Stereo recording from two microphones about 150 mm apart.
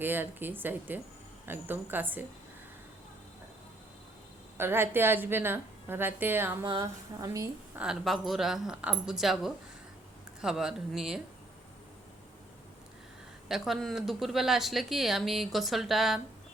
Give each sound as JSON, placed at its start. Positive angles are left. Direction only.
{"t": 0.0, "sound": "a woman's voice", "side_deg": -15}
{"t": 4.5, "sound": "a woman's voice", "side_deg": -15}
{"t": 6.7, "sound": "a woman's voice", "side_deg": -25}
{"t": 7.8, "sound": "speech", "side_deg": 0}
{"t": 13.5, "sound": "speech", "side_deg": 0}